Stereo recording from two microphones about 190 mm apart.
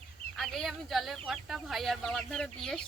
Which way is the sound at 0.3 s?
Centre (ahead or behind).